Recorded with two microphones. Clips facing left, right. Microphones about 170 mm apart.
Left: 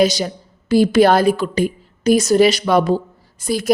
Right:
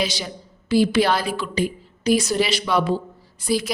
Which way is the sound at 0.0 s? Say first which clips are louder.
Left 10 dB; 40° left (ahead or behind).